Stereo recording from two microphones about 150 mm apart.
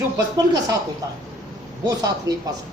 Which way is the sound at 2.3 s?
25° right (ahead or behind).